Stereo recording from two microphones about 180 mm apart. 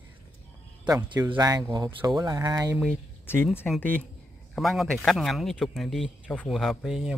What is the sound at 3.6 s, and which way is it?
Speech, 10° left (ahead or behind).